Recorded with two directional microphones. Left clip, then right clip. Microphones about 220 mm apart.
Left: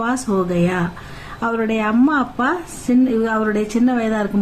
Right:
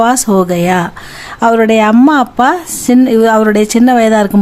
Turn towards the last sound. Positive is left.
turn(degrees=-55)  # may be behind; listen again after turning